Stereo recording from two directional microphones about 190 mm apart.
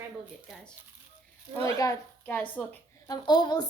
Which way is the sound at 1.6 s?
15° left (ahead or behind).